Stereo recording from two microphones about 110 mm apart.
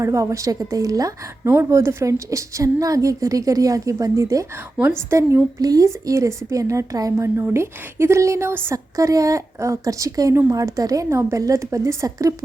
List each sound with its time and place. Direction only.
0.0 s a woman's voice: 30° right (ahead or behind)